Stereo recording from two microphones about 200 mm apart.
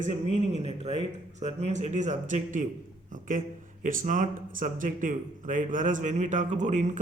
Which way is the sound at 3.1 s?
40° right (ahead or behind).